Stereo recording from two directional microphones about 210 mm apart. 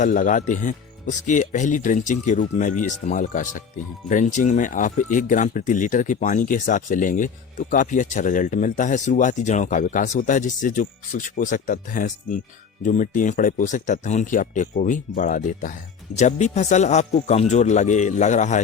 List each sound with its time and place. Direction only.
0.0 s speech: 40° left (ahead or behind)